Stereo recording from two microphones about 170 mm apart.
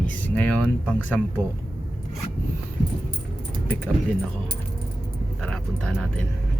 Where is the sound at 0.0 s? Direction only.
10° left (ahead or behind).